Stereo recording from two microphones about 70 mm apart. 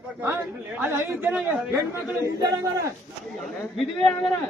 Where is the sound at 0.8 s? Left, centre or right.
Right.